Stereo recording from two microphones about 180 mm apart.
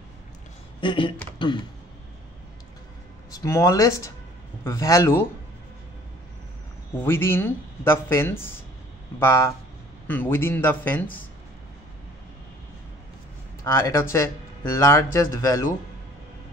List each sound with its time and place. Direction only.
0.7 s speech: 25° left (ahead or behind)
3.3 s speech: 15° left (ahead or behind)
7.0 s speech: 15° left (ahead or behind)
13.7 s speech: 15° left (ahead or behind)